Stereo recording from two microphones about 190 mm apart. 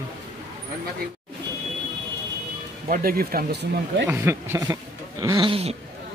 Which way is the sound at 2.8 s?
50° right (ahead or behind).